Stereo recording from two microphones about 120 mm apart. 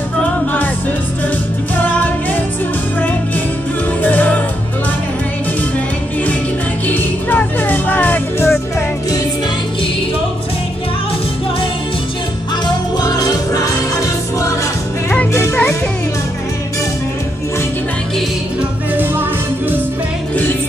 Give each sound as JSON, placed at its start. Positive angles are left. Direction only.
{"t": 1.8, "sound": "music", "side_deg": 15}
{"t": 4.0, "sound": "music", "side_deg": 15}
{"t": 6.9, "sound": "music", "side_deg": 15}
{"t": 13.0, "sound": "music", "side_deg": 35}
{"t": 18.6, "sound": "music", "side_deg": -15}